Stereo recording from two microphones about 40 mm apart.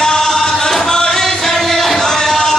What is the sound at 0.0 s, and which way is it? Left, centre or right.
Music, centre.